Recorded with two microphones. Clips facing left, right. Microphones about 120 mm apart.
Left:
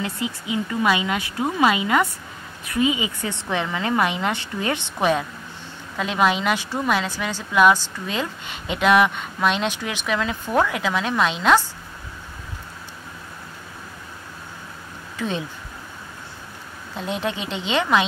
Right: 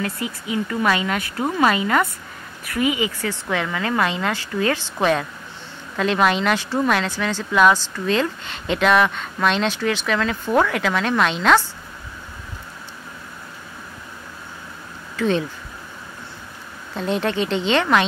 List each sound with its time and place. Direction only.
0.0 s a woman's voice: 20° left (ahead or behind)
5.9 s speech: 5° left (ahead or behind)
15.1 s speech: 10° left (ahead or behind)
16.9 s speech: 5° left (ahead or behind)